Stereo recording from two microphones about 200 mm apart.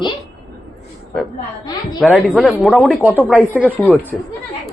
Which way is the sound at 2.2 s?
5° left (ahead or behind).